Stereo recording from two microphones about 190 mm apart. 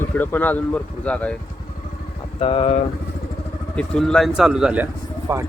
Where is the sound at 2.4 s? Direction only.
30° left (ahead or behind).